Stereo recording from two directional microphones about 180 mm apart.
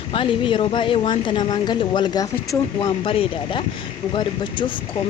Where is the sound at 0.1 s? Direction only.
30° left (ahead or behind).